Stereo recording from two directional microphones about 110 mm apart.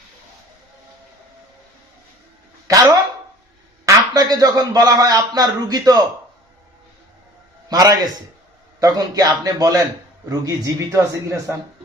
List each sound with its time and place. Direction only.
2.6 s a man's voice: 30° right (ahead or behind)
7.7 s a man's voice: 35° right (ahead or behind)